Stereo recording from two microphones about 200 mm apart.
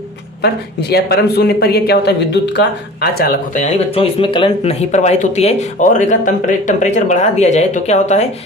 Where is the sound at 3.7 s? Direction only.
30° left (ahead or behind).